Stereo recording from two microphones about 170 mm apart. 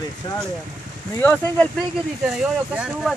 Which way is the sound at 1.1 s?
10° left (ahead or behind).